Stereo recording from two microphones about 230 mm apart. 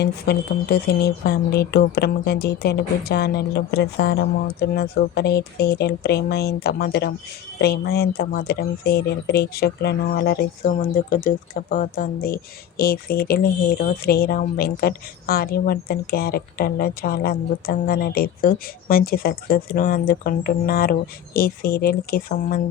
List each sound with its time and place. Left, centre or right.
0.0 s speech: left